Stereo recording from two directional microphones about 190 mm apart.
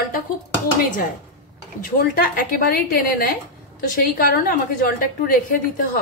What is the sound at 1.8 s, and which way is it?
A woman's voice, 50° left (ahead or behind).